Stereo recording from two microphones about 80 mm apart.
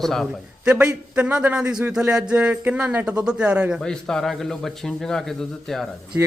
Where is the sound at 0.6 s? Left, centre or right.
Centre.